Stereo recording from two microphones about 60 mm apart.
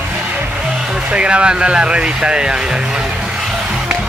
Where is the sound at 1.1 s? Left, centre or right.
Centre.